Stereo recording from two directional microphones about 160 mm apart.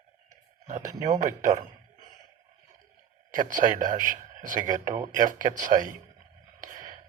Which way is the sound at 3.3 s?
55° right (ahead or behind).